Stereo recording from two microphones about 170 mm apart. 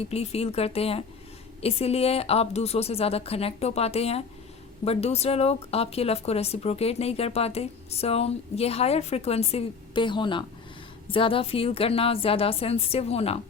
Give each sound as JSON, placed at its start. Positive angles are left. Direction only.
{"t": 0.0, "sound": "a woman's voice", "side_deg": 35}